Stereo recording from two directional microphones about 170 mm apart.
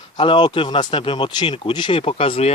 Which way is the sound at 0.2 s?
30° left (ahead or behind).